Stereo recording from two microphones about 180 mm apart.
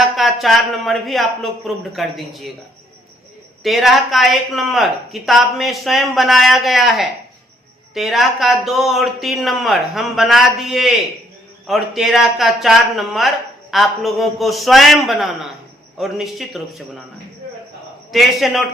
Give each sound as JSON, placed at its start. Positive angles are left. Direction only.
{"t": 0.2, "sound": "speech", "side_deg": 0}
{"t": 3.6, "sound": "speech", "side_deg": 0}
{"t": 18.1, "sound": "speech", "side_deg": 0}